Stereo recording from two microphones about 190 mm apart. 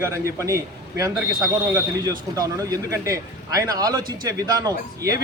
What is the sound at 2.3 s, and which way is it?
Speech, 20° right (ahead or behind).